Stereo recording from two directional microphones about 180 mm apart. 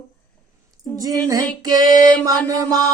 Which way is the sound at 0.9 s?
20° right (ahead or behind).